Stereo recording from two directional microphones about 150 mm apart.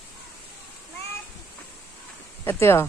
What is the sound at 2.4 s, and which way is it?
Speech, 15° left (ahead or behind).